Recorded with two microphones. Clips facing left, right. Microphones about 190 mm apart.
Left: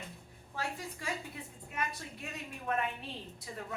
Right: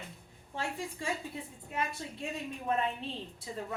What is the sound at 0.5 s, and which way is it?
Speech, 25° right (ahead or behind).